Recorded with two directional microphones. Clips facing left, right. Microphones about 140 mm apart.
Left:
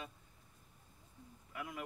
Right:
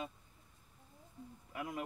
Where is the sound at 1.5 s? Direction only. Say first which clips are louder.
Right 4 dB; 30° right (ahead or behind).